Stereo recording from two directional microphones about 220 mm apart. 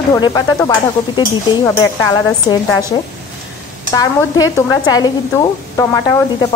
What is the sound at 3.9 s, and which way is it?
Speech, 15° left (ahead or behind).